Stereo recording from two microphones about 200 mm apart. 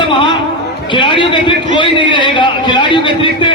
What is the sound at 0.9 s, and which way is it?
A man's voice, 25° left (ahead or behind).